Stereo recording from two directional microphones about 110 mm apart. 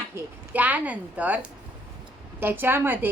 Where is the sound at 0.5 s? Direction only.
15° right (ahead or behind).